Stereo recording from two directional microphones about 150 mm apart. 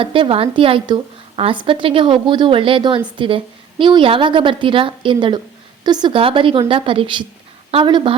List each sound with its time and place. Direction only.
0.0 s a woman's voice: 35° right (ahead or behind)